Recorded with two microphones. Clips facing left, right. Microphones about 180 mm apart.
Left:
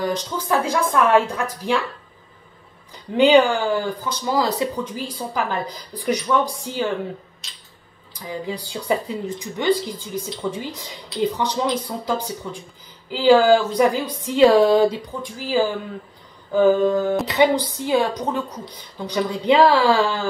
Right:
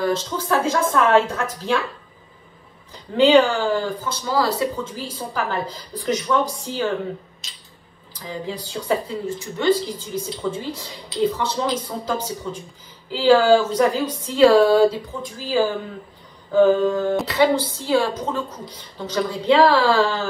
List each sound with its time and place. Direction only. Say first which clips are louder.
0.0 s speech: right 2 dB; 15° left (ahead or behind)
3.2 s speech: even; 15° left (ahead or behind)
8.5 s speech: even; 15° left (ahead or behind)